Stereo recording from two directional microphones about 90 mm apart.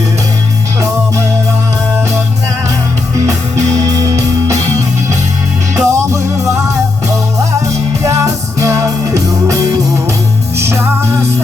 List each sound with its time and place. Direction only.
3.2 s music: 40° right (ahead or behind)
5.7 s music: 35° right (ahead or behind)
8.0 s music: 35° right (ahead or behind)